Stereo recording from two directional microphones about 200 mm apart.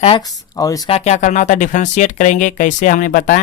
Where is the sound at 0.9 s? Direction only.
35° left (ahead or behind).